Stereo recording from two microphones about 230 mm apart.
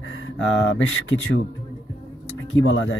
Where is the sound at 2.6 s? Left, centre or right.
Left.